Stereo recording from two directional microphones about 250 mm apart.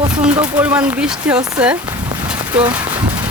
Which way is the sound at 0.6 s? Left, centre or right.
Centre.